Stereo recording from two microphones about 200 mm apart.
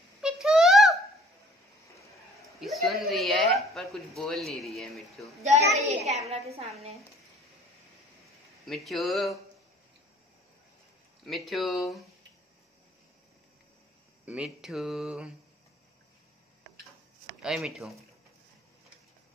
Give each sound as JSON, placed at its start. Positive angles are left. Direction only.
{"t": 0.2, "sound": "a sound", "side_deg": 0}
{"t": 2.4, "sound": "speech", "side_deg": 0}
{"t": 5.8, "sound": "a child's voice", "side_deg": -35}
{"t": 8.6, "sound": "speech", "side_deg": 0}
{"t": 11.2, "sound": "speech", "side_deg": 0}
{"t": 14.2, "sound": "speech", "side_deg": -5}
{"t": 17.4, "sound": "speech", "side_deg": 0}